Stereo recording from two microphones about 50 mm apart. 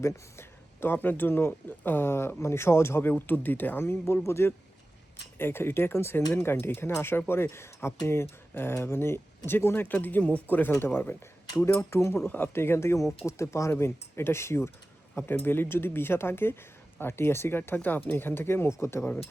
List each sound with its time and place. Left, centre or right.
0.0 s a sound: left
0.9 s speech: left
3.0 s speech: left
4.3 s speech: left
9.8 s speech: left
10.8 s speech: left
11.8 s speech: left
12.2 s speech: left
13.2 s speech: left
15.1 s speech: left